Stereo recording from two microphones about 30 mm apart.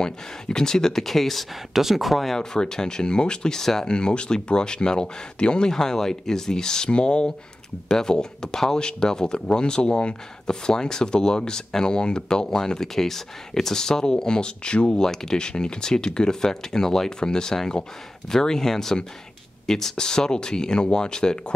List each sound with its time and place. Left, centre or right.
0.0 s speech: left; by 1.4 s centre
1.7 s speech: centre
2.3 s speech: left
3.5 s speech: centre
3.8 s speech: left
5.7 s speech: centre; by 10.1 s left
10.4 s speech: left
15.0 s speech: left